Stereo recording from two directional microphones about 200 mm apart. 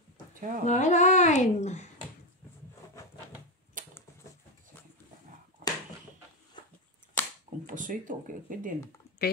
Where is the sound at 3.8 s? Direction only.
40° right (ahead or behind).